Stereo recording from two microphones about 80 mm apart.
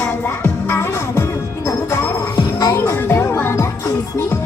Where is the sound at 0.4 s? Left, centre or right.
Left.